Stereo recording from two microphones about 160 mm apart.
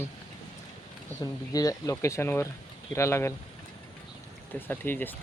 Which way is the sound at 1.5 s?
20° left (ahead or behind).